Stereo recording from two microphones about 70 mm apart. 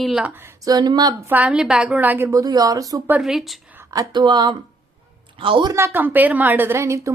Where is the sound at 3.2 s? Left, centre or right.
Centre.